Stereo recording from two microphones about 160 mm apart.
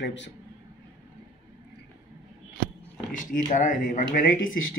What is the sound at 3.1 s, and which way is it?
Speech, 55° left (ahead or behind).